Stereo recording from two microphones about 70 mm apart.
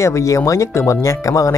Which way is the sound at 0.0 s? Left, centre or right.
Left.